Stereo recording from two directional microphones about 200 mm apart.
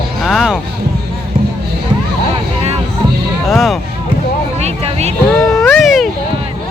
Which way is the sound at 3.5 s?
Centre (ahead or behind).